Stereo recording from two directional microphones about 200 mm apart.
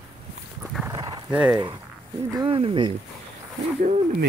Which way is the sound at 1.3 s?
5° right (ahead or behind).